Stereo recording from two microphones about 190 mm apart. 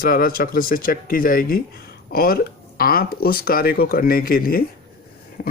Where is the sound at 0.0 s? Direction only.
50° left (ahead or behind).